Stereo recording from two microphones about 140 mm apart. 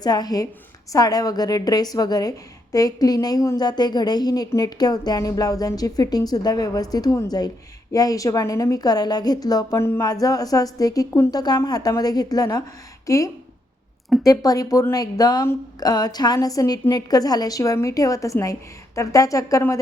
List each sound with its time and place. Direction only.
0.0 s a woman's voice: 30° left (ahead or behind)